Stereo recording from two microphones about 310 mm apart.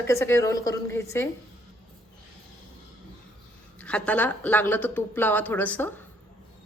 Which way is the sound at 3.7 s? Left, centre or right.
Centre.